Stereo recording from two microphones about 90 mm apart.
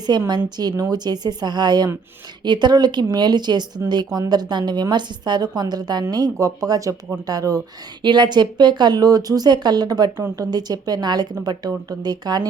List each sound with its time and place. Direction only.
0.3 s a woman's voice: 55° right (ahead or behind)
8.0 s a woman's voice: 55° right (ahead or behind)